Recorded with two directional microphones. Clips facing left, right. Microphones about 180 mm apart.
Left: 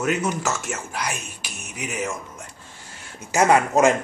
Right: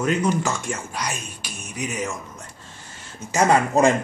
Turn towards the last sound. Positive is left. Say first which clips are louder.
# even
turn(degrees=5)  # may be behind; listen again after turning